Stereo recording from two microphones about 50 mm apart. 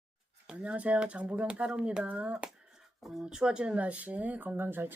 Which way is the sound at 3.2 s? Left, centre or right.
Centre.